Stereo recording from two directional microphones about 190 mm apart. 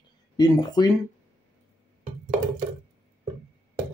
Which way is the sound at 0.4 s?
20° left (ahead or behind).